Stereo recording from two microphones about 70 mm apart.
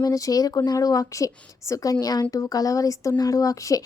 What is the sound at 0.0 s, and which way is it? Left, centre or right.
A woman's voice, left.